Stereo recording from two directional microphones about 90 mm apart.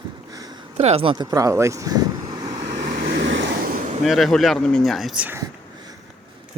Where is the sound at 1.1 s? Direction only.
45° right (ahead or behind).